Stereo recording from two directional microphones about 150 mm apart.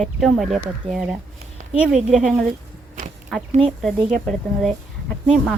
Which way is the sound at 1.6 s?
55° right (ahead or behind).